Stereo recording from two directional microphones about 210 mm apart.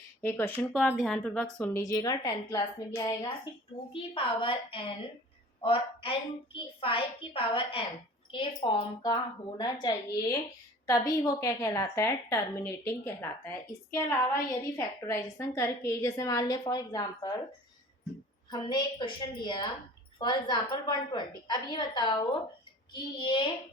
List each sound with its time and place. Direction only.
0.2 s a woman's voice: 10° left (ahead or behind)
0.7 s a woman's voice: 5° right (ahead or behind); by 17.3 s 20° left (ahead or behind)
18.5 s a woman's voice: 20° left (ahead or behind)